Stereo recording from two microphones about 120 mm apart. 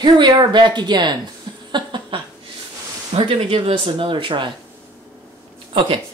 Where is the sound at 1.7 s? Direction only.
40° right (ahead or behind).